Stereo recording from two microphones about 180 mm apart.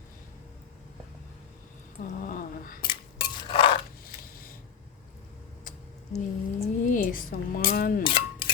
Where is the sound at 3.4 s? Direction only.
30° left (ahead or behind).